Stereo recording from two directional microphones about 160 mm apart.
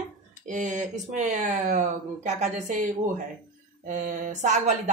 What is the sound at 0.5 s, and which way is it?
Speech, 50° right (ahead or behind).